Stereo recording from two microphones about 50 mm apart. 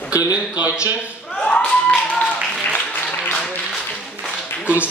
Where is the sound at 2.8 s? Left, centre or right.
Centre.